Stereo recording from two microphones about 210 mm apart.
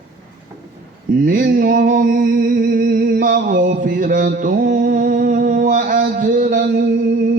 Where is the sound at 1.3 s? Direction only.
40° right (ahead or behind).